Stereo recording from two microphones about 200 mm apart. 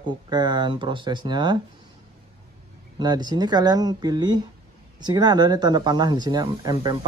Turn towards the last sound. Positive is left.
turn(degrees=-20)  # may be behind; listen again after turning